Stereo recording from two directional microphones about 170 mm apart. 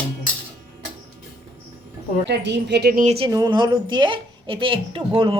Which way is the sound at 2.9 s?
40° right (ahead or behind).